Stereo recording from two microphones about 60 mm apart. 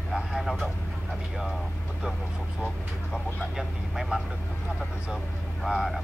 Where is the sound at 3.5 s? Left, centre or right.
Centre.